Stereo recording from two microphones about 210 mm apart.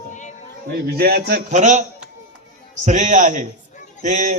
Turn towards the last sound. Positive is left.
turn(degrees=-35)  # may be behind; listen again after turning